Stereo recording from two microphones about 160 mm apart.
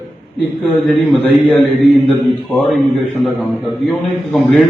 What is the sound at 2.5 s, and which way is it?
A man's voice, centre (ahead or behind).